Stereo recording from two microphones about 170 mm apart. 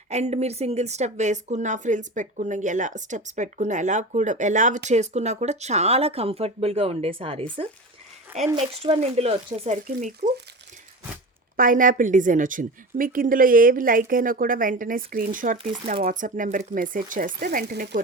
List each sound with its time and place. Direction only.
0.1 s a woman's voice: 40° right (ahead or behind)
11.5 s a woman's voice: 55° right (ahead or behind)
15.5 s speech: 30° right (ahead or behind)
16.0 s a woman's voice: 50° right (ahead or behind)